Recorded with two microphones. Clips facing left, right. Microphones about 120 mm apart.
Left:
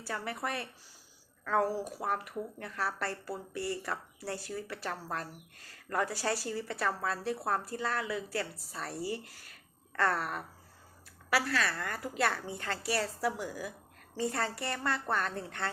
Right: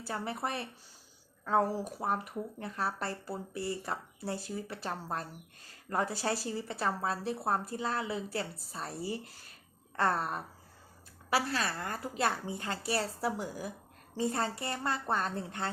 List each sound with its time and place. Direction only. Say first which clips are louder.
0.1 s speech: right 1 dB; 25° right (ahead or behind)